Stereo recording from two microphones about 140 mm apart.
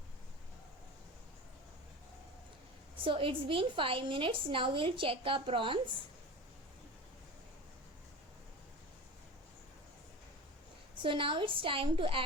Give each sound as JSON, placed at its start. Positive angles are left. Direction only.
{"t": 3.0, "sound": "a woman's voice", "side_deg": -40}
{"t": 11.0, "sound": "a woman's voice", "side_deg": -40}